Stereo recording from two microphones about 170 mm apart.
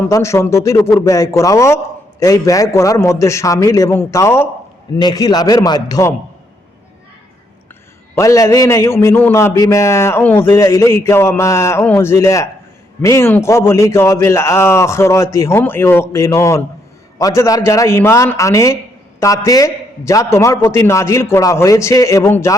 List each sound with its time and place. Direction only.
0.0 s a man's voice: 15° left (ahead or behind)
8.1 s a man's voice: 20° left (ahead or behind)